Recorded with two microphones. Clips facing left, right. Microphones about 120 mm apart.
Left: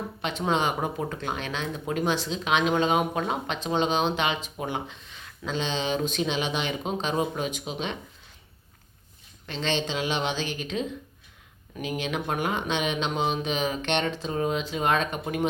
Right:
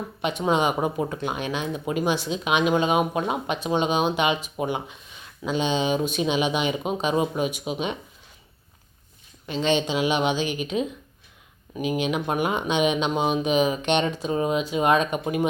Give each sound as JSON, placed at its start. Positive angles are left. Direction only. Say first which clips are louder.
{"t": 0.2, "sound": "speech", "louder": "right 4 dB", "side_deg": -15}
{"t": 9.5, "sound": "speech", "louder": "right 5 dB", "side_deg": -15}